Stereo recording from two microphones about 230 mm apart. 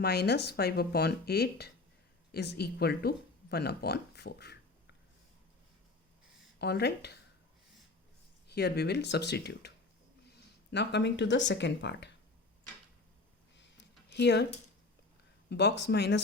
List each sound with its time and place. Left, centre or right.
0.0 s speech: left
6.6 s speech: left
8.4 s speech: left
13.6 s a sound: left
15.4 s speech: left